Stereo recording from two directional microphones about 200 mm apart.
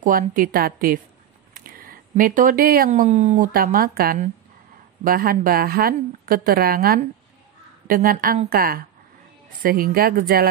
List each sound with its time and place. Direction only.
0.0 s a woman's voice: 40° right (ahead or behind)